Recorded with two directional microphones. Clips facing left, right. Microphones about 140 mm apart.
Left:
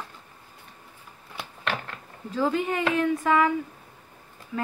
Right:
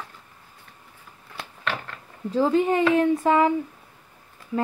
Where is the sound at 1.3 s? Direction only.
20° left (ahead or behind).